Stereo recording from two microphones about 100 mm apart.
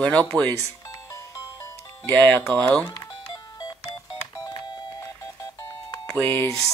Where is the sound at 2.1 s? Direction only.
15° left (ahead or behind).